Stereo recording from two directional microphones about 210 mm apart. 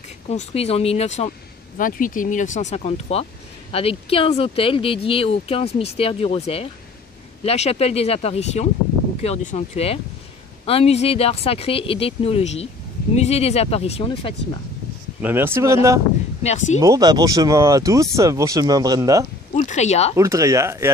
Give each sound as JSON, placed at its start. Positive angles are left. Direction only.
{"t": 0.3, "sound": "speech", "side_deg": 30}
{"t": 15.2, "sound": "speech", "side_deg": -10}
{"t": 16.4, "sound": "speech", "side_deg": 35}
{"t": 16.8, "sound": "speech", "side_deg": -15}
{"t": 19.5, "sound": "speech", "side_deg": 35}
{"t": 20.2, "sound": "speech", "side_deg": -15}